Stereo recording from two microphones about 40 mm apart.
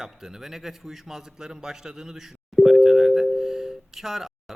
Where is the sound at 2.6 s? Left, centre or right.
Centre.